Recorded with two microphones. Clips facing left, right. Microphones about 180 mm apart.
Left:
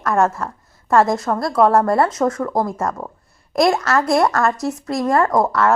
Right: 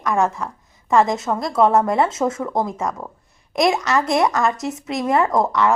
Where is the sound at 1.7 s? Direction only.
20° right (ahead or behind).